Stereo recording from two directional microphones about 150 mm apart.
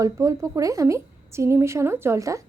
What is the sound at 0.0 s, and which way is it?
A woman's voice, 20° right (ahead or behind).